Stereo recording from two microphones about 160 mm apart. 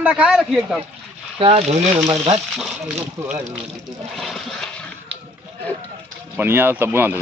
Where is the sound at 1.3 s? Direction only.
40° right (ahead or behind).